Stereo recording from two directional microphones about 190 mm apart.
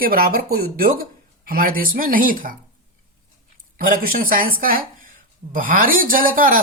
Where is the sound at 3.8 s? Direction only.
45° right (ahead or behind).